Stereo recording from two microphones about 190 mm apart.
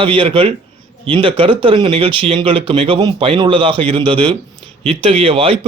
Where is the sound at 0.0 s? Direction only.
25° right (ahead or behind).